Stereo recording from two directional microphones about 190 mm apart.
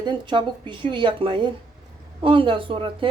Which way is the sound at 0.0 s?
25° right (ahead or behind).